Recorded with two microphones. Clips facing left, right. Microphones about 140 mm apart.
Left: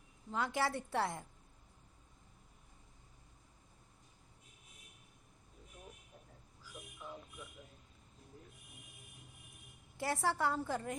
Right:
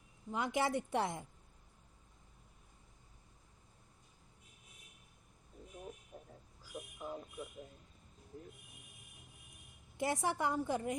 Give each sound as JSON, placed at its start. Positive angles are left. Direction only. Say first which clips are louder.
{"t": 0.3, "sound": "a woman's voice", "louder": "right 1 dB", "side_deg": -20}
{"t": 6.6, "sound": "a sound", "louder": "right 5 dB", "side_deg": -40}
{"t": 10.0, "sound": "a woman's voice", "louder": "even", "side_deg": -20}